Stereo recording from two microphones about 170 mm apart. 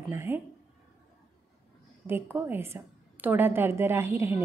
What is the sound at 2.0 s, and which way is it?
A woman's voice, 10° right (ahead or behind).